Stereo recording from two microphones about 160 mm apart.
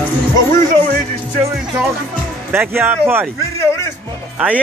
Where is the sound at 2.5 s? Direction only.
15° right (ahead or behind).